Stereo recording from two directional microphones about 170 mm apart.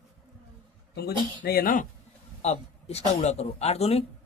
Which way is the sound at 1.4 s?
65° left (ahead or behind).